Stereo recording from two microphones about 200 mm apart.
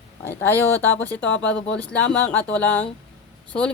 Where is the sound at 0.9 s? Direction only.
70° left (ahead or behind).